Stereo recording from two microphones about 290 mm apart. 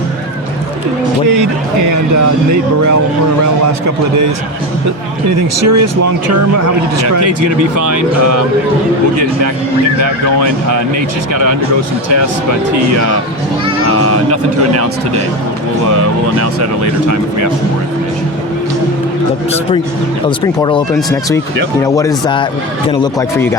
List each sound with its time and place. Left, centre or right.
5.6 s speech: right
14.0 s speech: right
20.2 s speech: centre